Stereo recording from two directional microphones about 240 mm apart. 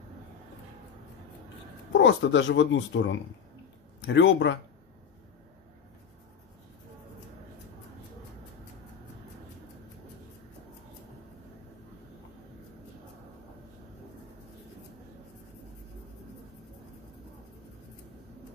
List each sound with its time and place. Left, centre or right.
1.9 s speech: left